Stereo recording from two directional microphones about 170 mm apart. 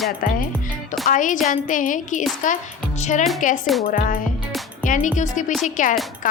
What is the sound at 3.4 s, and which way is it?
Speech, 50° left (ahead or behind).